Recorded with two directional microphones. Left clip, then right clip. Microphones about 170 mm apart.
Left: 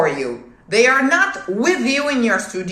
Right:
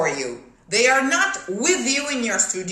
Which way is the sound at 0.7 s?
10° right (ahead or behind).